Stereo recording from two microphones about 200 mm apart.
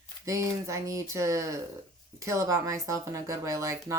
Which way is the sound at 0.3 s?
15° right (ahead or behind).